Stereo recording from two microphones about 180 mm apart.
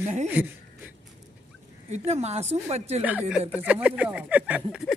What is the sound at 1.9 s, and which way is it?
A woman's voice, 35° right (ahead or behind).